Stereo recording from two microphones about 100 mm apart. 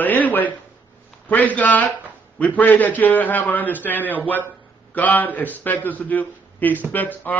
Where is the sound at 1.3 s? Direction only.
15° left (ahead or behind).